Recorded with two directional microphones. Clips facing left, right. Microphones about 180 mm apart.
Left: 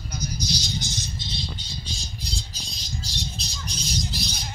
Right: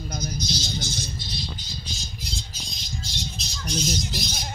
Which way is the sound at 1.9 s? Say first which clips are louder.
Left 1 dB; 35° left (ahead or behind).